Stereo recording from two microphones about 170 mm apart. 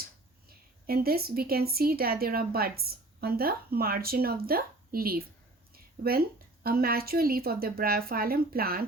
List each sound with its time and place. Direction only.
0.0 s a woman's voice: 65° right (ahead or behind)